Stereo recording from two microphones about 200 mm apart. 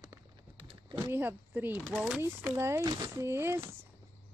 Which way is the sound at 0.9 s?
10° right (ahead or behind).